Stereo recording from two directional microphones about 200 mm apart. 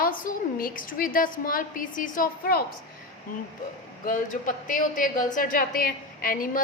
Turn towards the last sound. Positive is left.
turn(degrees=45)  # may be behind; listen again after turning